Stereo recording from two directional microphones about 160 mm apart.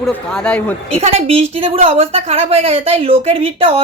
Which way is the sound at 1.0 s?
40° right (ahead or behind).